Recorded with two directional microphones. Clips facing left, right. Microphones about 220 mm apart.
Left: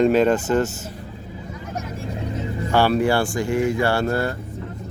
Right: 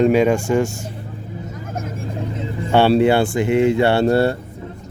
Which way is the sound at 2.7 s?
25° right (ahead or behind).